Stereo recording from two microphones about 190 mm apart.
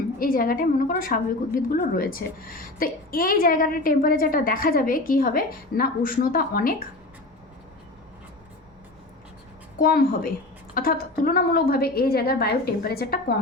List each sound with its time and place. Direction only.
0.2 s a woman's voice: 50° left (ahead or behind)
9.7 s a woman's voice: 50° left (ahead or behind)